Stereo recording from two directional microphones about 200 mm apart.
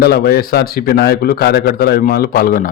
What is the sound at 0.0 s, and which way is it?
A man's voice, 50° left (ahead or behind).